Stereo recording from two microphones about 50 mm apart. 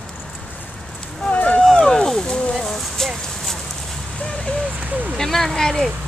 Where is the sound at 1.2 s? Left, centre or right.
Left.